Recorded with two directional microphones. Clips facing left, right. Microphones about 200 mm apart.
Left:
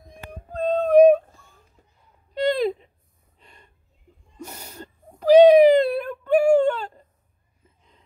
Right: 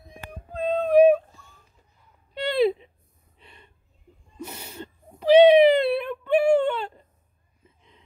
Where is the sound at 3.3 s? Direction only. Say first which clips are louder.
Right 1 dB; 40° left (ahead or behind).